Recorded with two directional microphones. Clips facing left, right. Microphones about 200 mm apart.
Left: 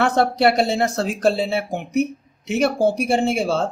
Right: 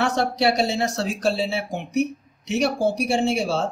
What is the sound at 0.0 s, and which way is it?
Speech, 55° left (ahead or behind).